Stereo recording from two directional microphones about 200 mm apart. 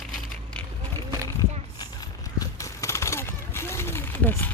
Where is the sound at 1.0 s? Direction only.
15° right (ahead or behind).